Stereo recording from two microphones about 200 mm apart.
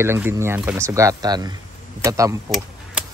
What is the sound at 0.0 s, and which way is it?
Speech, 10° right (ahead or behind).